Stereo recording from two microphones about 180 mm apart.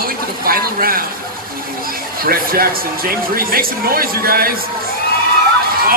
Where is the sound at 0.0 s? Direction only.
55° right (ahead or behind).